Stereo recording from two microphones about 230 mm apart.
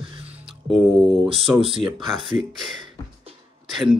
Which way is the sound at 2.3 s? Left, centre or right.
Centre.